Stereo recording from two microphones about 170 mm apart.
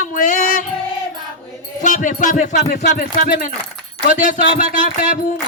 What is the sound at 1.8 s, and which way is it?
Music, 50° left (ahead or behind).